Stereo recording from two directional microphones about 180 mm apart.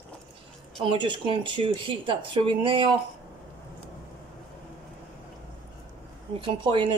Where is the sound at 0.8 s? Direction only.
30° right (ahead or behind).